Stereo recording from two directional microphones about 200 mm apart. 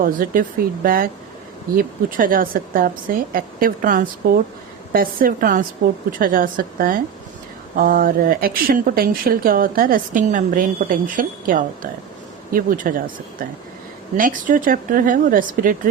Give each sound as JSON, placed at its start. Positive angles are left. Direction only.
{"t": 0.0, "sound": "speech", "side_deg": -45}
{"t": 14.2, "sound": "speech", "side_deg": -40}